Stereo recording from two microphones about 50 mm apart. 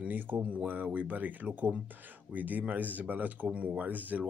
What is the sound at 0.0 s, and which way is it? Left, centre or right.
Speech, right.